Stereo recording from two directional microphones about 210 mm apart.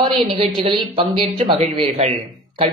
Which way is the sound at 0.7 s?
25° right (ahead or behind).